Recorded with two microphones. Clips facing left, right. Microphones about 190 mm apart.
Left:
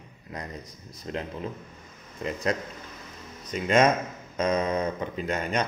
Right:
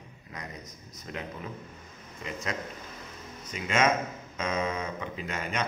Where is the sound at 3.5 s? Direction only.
35° left (ahead or behind).